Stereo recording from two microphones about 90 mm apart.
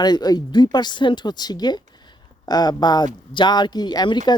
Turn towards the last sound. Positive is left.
turn(degrees=55)  # may be behind; listen again after turning